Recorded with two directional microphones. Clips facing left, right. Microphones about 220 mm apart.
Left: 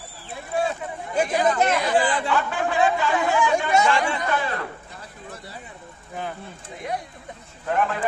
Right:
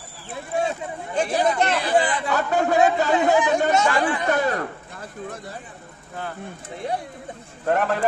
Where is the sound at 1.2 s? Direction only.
10° left (ahead or behind).